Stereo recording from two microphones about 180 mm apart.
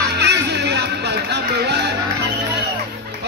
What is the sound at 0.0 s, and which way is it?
Music, 65° right (ahead or behind).